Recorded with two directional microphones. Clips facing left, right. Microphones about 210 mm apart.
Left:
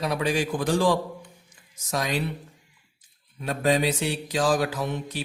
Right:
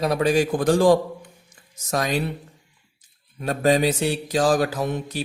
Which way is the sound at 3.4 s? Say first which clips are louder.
Right 4 dB; 45° right (ahead or behind).